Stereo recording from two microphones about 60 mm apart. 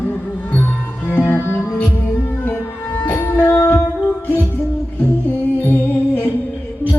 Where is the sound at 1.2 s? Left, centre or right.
Left.